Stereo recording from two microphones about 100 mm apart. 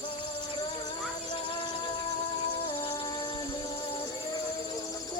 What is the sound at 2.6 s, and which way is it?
Music, 70° left (ahead or behind).